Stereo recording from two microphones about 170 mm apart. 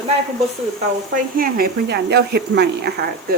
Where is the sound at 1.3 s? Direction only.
60° right (ahead or behind).